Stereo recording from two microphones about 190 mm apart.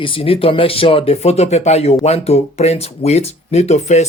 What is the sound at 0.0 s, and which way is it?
Speech, 30° left (ahead or behind).